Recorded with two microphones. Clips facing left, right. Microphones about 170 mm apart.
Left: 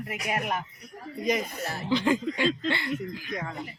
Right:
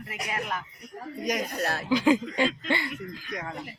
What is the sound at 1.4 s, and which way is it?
Speech, 70° right (ahead or behind).